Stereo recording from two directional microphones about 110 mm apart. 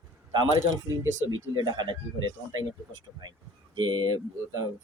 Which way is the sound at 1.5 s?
40° right (ahead or behind).